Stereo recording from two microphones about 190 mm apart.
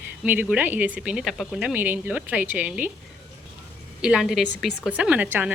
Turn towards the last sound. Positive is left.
turn(degrees=-5)  # may be behind; listen again after turning